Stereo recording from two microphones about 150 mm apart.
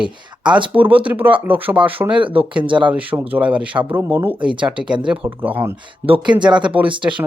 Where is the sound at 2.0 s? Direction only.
35° right (ahead or behind).